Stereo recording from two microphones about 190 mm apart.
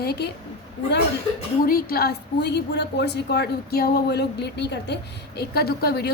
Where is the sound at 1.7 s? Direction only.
55° left (ahead or behind).